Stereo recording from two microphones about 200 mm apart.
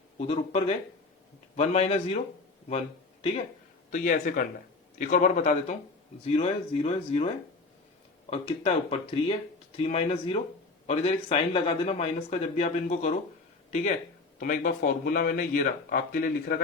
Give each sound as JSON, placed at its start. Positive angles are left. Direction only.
{"t": 0.2, "sound": "speech", "side_deg": 30}
{"t": 3.9, "sound": "speech", "side_deg": 40}
{"t": 8.3, "sound": "speech", "side_deg": 30}